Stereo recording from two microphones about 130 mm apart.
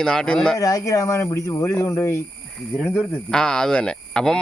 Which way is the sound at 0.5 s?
25° left (ahead or behind).